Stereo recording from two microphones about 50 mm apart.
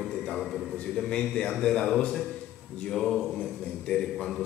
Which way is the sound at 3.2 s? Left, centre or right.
Centre.